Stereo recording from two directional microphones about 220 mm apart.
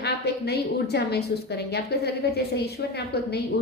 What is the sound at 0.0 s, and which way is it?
A woman's voice, 50° left (ahead or behind).